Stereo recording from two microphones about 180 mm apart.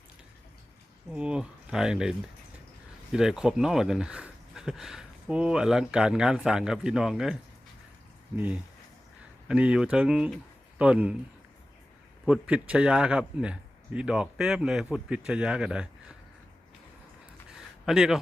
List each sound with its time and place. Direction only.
1.1 s speech: 5° right (ahead or behind)
8.4 s speech: 10° right (ahead or behind)
12.2 s speech: 5° right (ahead or behind)
17.8 s speech: 5° right (ahead or behind)